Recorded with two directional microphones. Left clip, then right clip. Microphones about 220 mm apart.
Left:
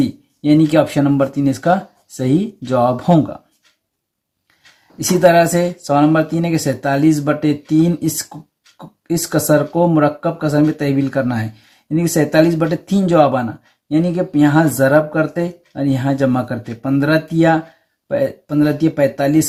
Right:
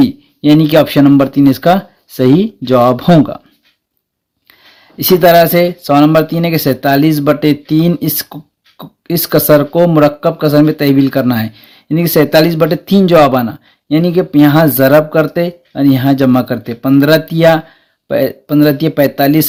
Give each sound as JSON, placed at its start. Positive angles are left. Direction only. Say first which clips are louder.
{"t": 0.0, "sound": "speech", "louder": "right 8 dB", "side_deg": -40}
{"t": 4.9, "sound": "speech", "louder": "right 5 dB", "side_deg": -40}